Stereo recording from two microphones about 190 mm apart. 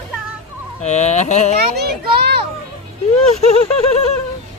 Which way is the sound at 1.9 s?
55° right (ahead or behind).